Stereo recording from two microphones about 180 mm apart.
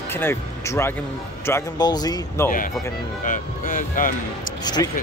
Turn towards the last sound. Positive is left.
turn(degrees=25)  # may be behind; listen again after turning